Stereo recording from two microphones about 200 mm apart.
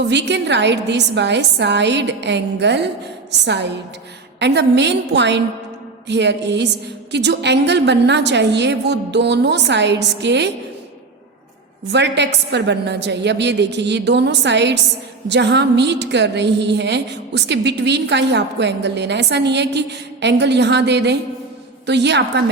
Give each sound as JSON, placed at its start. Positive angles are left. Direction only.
{"t": 0.1, "sound": "a woman's voice", "side_deg": -60}
{"t": 11.9, "sound": "a woman's voice", "side_deg": -60}